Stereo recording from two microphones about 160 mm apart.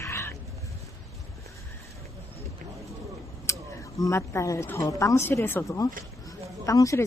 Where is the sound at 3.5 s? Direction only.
20° left (ahead or behind).